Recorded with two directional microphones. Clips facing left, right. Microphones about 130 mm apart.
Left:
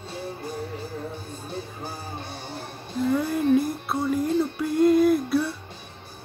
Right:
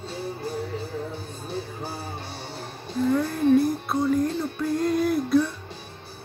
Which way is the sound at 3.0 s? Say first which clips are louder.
Right 1 dB; 5° left (ahead or behind).